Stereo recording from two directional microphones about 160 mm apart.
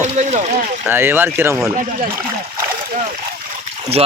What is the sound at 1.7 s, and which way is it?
Speech, 50° right (ahead or behind).